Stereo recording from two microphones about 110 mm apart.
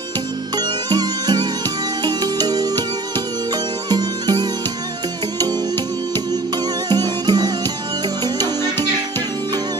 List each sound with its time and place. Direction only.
0.6 s music: 40° right (ahead or behind)
3.9 s music: 40° right (ahead or behind)
6.9 s music: 40° right (ahead or behind)